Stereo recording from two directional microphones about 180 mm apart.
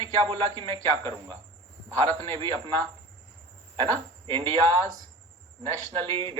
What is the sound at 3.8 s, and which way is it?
A man's voice, 30° right (ahead or behind).